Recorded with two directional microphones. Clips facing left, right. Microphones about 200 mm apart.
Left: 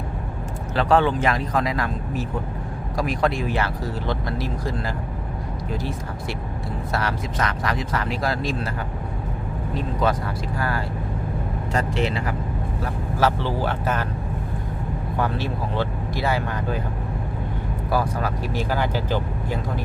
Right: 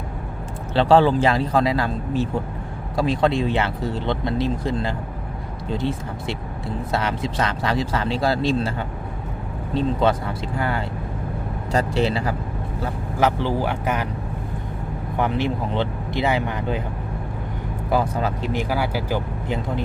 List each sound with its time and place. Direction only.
0.7 s speech: 30° right (ahead or behind)
9.7 s speech: 25° right (ahead or behind)
11.7 s speech: 35° right (ahead or behind)
12.8 s speech: 15° right (ahead or behind)
15.2 s speech: 20° right (ahead or behind)
17.9 s speech: 20° right (ahead or behind)
18.7 s speech: 10° right (ahead or behind)